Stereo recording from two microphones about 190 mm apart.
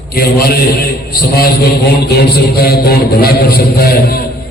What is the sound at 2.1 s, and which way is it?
A man's voice, 55° left (ahead or behind).